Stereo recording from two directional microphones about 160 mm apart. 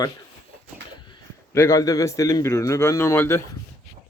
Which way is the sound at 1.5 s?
20° left (ahead or behind).